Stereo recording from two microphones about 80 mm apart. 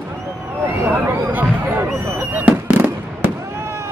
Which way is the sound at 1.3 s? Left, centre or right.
Right.